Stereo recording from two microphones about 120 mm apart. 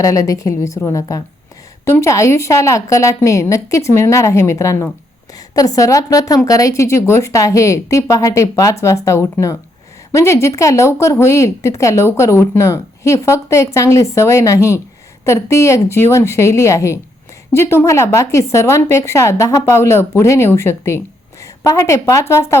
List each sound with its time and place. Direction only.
0.0 s a woman's voice: 30° left (ahead or behind)